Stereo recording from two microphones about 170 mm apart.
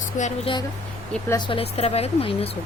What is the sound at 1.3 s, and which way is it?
Speech, 25° left (ahead or behind).